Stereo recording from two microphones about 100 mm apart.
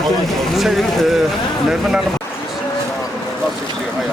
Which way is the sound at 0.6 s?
Centre (ahead or behind).